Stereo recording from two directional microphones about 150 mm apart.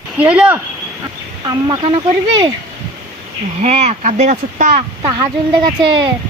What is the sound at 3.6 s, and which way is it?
A child's voice, 45° right (ahead or behind).